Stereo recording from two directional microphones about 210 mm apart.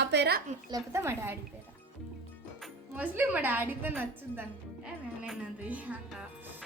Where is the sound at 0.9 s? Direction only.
10° right (ahead or behind).